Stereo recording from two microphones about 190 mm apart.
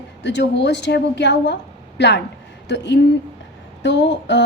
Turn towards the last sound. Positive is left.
turn(degrees=70)  # may be behind; listen again after turning